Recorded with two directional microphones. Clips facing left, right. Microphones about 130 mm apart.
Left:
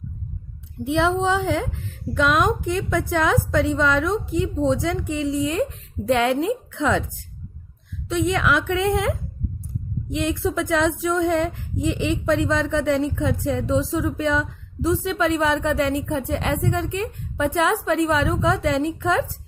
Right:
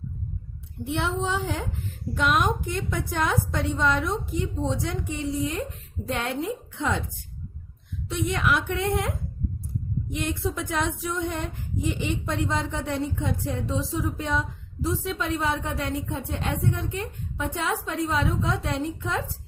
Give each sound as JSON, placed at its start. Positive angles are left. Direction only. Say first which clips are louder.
{"t": 0.9, "sound": "speech", "louder": "left 7 dB", "side_deg": 90}
{"t": 8.1, "sound": "speech", "louder": "left 5 dB", "side_deg": 90}